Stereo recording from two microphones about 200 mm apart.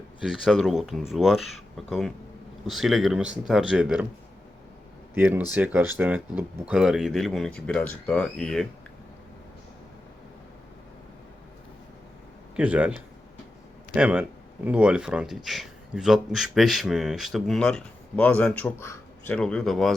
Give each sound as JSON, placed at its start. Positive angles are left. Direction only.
{"t": 0.2, "sound": "speech", "side_deg": 0}
{"t": 5.1, "sound": "speech", "side_deg": -10}
{"t": 12.5, "sound": "speech", "side_deg": -5}
{"t": 13.9, "sound": "speech", "side_deg": -5}